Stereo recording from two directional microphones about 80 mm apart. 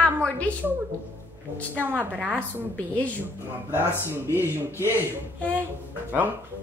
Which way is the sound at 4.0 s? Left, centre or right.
Right.